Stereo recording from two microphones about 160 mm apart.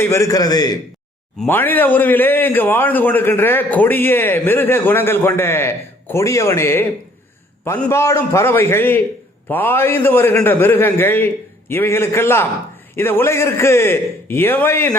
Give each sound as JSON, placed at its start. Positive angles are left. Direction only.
{"t": 0.0, "sound": "a man's voice", "side_deg": 20}
{"t": 1.4, "sound": "a man's voice", "side_deg": 10}